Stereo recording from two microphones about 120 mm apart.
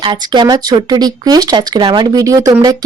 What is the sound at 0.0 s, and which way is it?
Speech, 40° right (ahead or behind).